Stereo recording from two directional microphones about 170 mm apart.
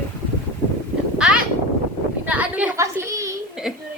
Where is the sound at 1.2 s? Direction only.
5° right (ahead or behind).